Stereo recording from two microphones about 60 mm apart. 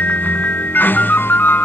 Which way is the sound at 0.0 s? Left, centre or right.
Left.